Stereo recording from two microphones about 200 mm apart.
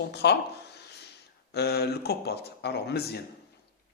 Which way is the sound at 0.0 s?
55° left (ahead or behind).